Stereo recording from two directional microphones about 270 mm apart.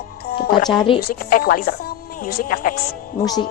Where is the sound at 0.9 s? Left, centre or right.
Left.